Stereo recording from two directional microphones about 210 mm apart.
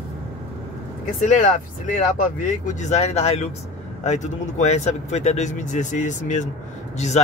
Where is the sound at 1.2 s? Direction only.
40° left (ahead or behind).